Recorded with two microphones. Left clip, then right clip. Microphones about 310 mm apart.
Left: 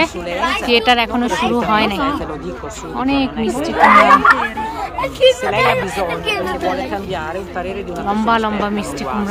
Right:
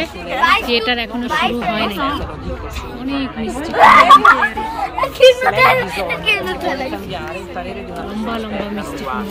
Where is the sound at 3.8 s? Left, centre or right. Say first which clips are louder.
Right 2 dB; right.